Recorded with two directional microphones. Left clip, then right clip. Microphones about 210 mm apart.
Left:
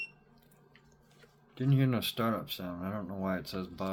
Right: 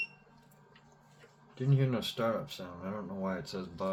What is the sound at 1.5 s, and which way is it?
Speech, 50° left (ahead or behind).